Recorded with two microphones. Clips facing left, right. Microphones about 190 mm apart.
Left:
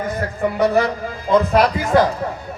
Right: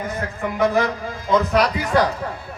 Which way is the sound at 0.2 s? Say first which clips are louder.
Left 2 dB; 35° left (ahead or behind).